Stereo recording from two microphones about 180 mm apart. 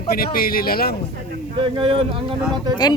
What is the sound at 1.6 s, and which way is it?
Speech, 30° right (ahead or behind).